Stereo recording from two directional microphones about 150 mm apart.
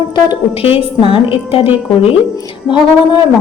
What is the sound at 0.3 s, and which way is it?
A woman's voice, 35° left (ahead or behind).